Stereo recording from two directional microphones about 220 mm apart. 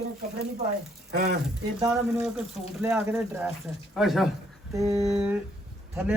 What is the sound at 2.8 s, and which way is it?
Speech, 10° right (ahead or behind).